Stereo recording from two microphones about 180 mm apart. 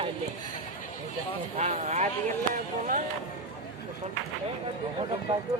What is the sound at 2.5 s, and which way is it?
Speech, 50° right (ahead or behind).